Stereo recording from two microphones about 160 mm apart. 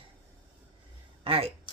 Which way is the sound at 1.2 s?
35° right (ahead or behind).